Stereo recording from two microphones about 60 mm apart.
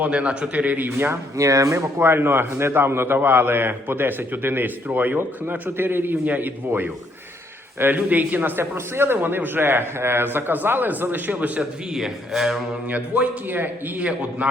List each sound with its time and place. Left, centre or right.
0.0 s a man's voice: centre
0.9 s a man's voice: right
1.4 s speech: right
2.0 s a man's voice: right
11.9 s speech: centre
12.9 s a man's voice: right
13.6 s a man's voice: right
14.0 s a man's voice: right